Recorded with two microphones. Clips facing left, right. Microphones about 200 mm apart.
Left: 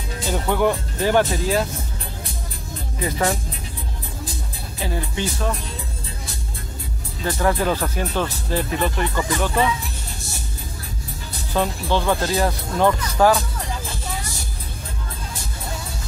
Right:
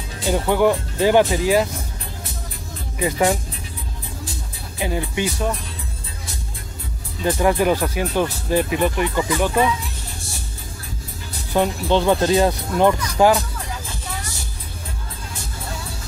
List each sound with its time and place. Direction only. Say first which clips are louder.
0.3 s speech: right 3 dB; 10° right (ahead or behind)
3.0 s speech: right 3 dB; 15° right (ahead or behind)
4.7 s speech: right 3 dB; 15° right (ahead or behind)
7.2 s speech: right 3 dB; 20° right (ahead or behind)
11.5 s speech: right 3 dB; 20° right (ahead or behind)